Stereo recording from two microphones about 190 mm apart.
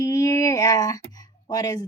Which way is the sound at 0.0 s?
20° left (ahead or behind).